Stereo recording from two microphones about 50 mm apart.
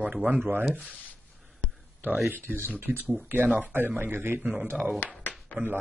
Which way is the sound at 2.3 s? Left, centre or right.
Right.